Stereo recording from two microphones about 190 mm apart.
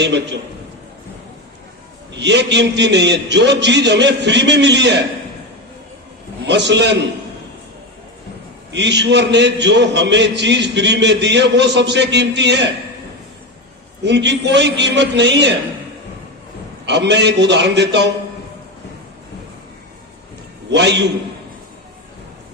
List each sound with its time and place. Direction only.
0.0 s a man's voice: 65° right (ahead or behind)
2.1 s a man's voice: 65° right (ahead or behind)
6.4 s a man's voice: 65° right (ahead or behind)
8.7 s a man's voice: 65° right (ahead or behind)
14.0 s a man's voice: 65° right (ahead or behind)
16.8 s a man's voice: 65° right (ahead or behind)
20.7 s a man's voice: 65° right (ahead or behind)